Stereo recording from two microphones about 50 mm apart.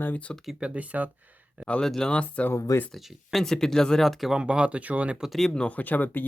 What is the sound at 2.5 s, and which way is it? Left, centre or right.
Speech, left.